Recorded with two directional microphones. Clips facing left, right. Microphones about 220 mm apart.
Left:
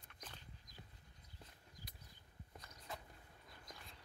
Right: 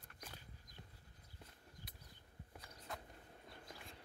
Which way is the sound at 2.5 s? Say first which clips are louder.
Right 1 dB; 5° right (ahead or behind).